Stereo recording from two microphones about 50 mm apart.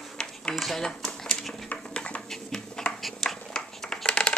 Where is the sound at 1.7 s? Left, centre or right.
Left.